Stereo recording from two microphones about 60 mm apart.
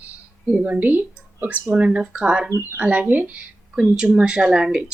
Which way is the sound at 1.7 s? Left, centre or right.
Centre.